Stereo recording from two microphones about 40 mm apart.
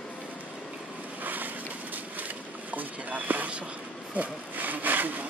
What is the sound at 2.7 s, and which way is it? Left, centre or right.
Speech, right.